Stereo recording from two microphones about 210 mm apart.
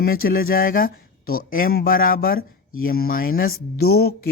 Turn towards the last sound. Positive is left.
turn(degrees=45)  # may be behind; listen again after turning